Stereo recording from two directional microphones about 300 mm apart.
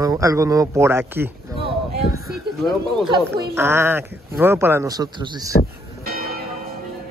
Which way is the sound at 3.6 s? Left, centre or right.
Centre.